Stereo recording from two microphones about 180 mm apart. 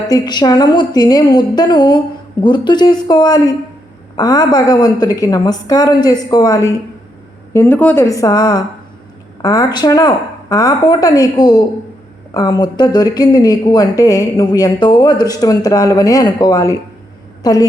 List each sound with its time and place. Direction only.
0.1 s a woman's voice: 25° left (ahead or behind)